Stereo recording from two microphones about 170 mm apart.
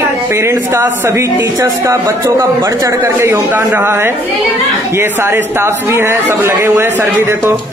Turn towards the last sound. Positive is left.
turn(degrees=-15)  # may be behind; listen again after turning